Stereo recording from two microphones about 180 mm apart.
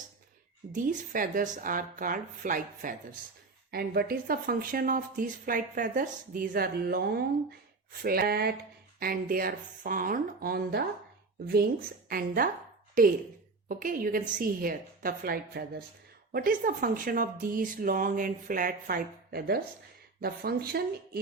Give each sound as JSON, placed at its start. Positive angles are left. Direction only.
{"t": 0.7, "sound": "speech", "side_deg": -45}
{"t": 3.7, "sound": "speech", "side_deg": -60}